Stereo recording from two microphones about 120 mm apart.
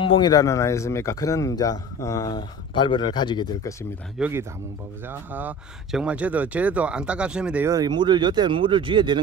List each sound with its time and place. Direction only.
0.0 s speech: 40° left (ahead or behind)
4.2 s speech: 20° right (ahead or behind)
7.6 s speech: 30° right (ahead or behind)